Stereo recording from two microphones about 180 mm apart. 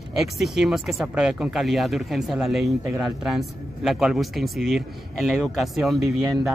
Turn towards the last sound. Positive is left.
turn(degrees=0)  # may be behind; listen again after turning